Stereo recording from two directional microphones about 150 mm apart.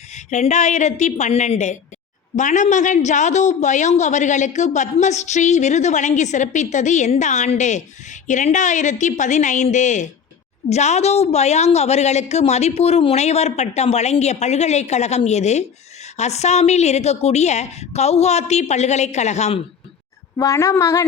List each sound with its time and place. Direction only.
0.1 s a woman's voice: 50° left (ahead or behind)
20.3 s a woman's voice: 20° left (ahead or behind)